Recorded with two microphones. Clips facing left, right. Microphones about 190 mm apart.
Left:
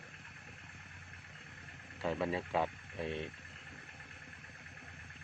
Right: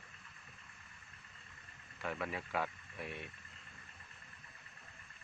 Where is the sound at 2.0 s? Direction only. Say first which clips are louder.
Left 6 dB; 25° left (ahead or behind).